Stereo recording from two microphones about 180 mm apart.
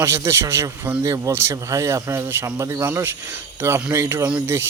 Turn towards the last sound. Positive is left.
turn(degrees=-15)  # may be behind; listen again after turning